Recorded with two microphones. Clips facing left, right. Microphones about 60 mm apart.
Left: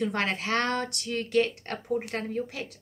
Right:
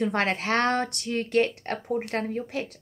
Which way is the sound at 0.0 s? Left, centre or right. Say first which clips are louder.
Right 3 dB; right.